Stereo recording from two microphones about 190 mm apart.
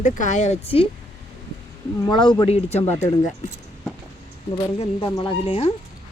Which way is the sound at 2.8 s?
15° left (ahead or behind).